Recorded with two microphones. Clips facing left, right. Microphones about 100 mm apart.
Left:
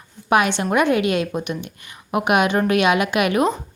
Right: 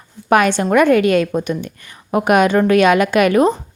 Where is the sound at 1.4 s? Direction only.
35° right (ahead or behind).